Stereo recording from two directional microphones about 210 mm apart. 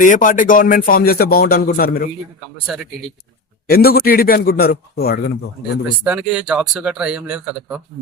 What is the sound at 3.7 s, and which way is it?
Speech, 45° left (ahead or behind).